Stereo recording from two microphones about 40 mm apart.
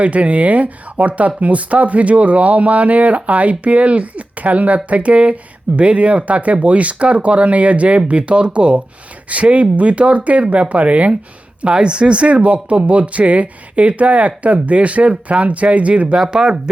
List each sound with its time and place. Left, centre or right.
0.0 s speech: right
16.3 s speech: centre